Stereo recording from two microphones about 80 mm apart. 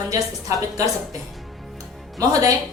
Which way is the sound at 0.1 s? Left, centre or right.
Right.